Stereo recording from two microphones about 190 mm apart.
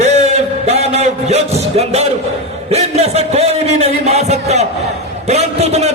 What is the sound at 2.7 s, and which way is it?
A man's voice, 35° right (ahead or behind).